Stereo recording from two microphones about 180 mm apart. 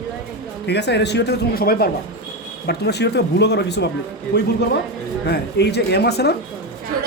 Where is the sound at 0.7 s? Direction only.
70° left (ahead or behind).